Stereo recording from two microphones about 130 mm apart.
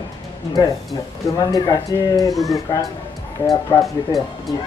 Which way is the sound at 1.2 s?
30° left (ahead or behind).